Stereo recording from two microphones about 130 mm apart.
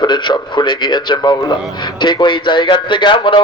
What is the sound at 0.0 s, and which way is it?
A man's voice, 35° left (ahead or behind).